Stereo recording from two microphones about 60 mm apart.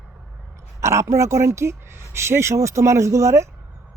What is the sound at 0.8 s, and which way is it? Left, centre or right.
A woman's voice, right.